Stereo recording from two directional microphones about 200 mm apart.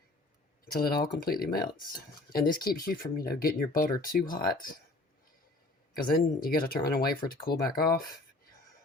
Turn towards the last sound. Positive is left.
turn(degrees=50)  # may be behind; listen again after turning